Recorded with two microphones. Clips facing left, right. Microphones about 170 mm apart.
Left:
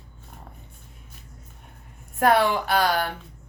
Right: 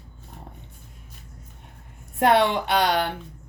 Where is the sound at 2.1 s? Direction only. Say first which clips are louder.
Right 1 dB; 25° right (ahead or behind).